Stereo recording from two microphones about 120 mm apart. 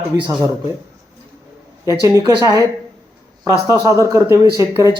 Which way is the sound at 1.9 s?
25° right (ahead or behind).